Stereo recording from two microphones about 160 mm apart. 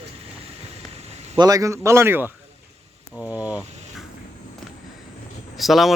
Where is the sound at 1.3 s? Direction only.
25° right (ahead or behind).